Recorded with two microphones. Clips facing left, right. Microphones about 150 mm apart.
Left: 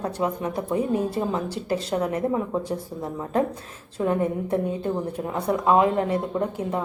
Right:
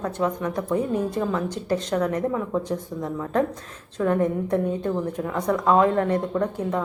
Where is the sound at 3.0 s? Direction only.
30° left (ahead or behind).